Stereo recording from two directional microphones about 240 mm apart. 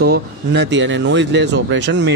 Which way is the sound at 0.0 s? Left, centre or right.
Right.